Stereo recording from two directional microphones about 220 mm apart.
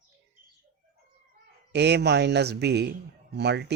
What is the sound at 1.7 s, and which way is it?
A man's voice, 50° right (ahead or behind).